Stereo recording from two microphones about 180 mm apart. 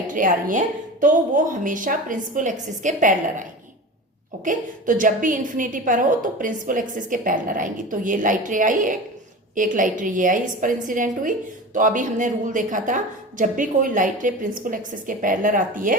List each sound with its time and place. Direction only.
0.1 s a woman's voice: 50° right (ahead or behind)
4.4 s a woman's voice: 45° right (ahead or behind)